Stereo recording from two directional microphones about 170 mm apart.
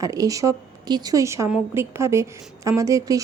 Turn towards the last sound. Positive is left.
turn(degrees=-20)  # may be behind; listen again after turning